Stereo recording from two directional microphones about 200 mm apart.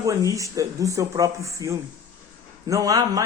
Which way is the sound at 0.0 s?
15° right (ahead or behind).